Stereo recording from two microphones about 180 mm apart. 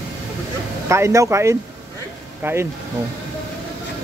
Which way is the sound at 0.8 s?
15° right (ahead or behind).